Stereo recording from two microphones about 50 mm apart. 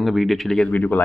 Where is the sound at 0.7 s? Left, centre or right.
Left.